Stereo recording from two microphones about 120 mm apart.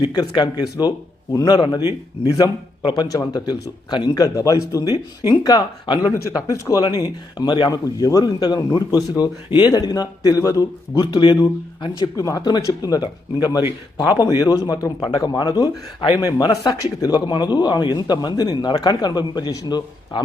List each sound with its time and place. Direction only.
0.0 s a man's voice: 35° left (ahead or behind)
7.7 s a man's voice: 30° left (ahead or behind)